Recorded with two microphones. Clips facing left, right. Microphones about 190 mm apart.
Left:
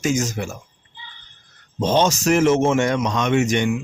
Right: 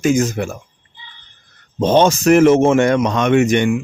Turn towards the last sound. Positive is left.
turn(degrees=-60)  # may be behind; listen again after turning